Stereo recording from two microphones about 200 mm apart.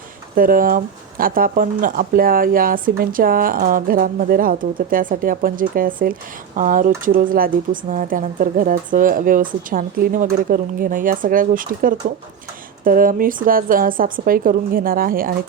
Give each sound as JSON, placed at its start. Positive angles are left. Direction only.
{"t": 0.3, "sound": "speech", "side_deg": -45}